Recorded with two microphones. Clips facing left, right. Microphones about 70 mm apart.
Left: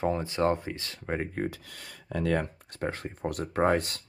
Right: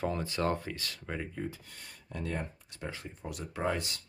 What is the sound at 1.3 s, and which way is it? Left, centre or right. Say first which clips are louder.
Speech: left 6 dB; left.